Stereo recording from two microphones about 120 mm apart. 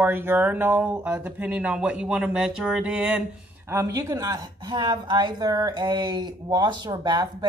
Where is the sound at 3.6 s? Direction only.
25° right (ahead or behind).